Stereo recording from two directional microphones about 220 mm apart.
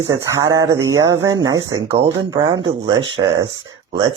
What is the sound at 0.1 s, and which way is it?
Speech, 15° right (ahead or behind).